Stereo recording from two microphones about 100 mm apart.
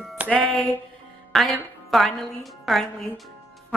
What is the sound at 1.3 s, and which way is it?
A woman's voice, centre (ahead or behind).